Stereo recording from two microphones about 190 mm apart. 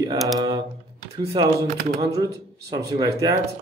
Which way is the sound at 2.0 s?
20° right (ahead or behind).